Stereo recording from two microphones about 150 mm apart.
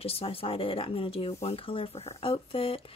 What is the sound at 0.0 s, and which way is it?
Speech, 40° left (ahead or behind).